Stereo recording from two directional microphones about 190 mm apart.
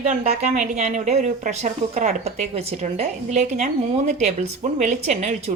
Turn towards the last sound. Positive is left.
turn(degrees=-35)  # may be behind; listen again after turning